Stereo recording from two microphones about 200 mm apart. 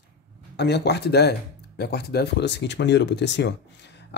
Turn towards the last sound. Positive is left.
turn(degrees=60)  # may be behind; listen again after turning